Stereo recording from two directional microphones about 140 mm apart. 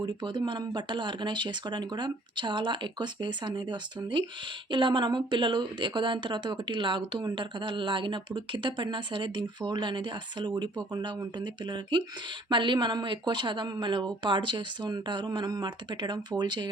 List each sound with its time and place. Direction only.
0.0 s speech: 30° right (ahead or behind)